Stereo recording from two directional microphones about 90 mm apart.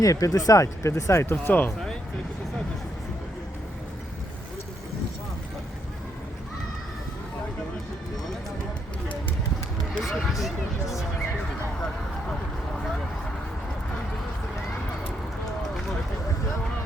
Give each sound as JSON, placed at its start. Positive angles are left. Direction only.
{"t": 0.0, "sound": "speech", "side_deg": 40}
{"t": 10.0, "sound": "speech", "side_deg": 0}